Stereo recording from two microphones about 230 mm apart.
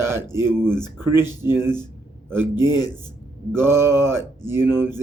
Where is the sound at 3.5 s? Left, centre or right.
Centre.